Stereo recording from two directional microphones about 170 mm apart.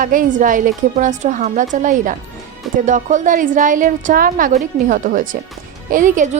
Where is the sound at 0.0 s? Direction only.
50° right (ahead or behind).